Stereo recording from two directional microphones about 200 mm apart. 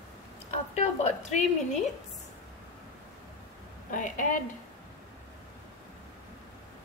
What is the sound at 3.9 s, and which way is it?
Speech, 40° left (ahead or behind).